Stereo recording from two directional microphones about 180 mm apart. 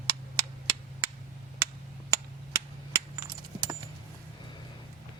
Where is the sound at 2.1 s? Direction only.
15° right (ahead or behind).